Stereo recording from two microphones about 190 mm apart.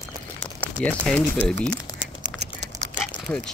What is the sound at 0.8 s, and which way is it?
Speech, 5° left (ahead or behind).